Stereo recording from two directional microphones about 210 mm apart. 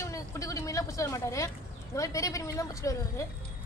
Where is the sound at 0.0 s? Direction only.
15° left (ahead or behind).